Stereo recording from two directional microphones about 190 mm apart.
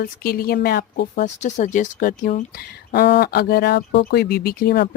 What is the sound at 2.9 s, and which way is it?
Speech, 60° left (ahead or behind).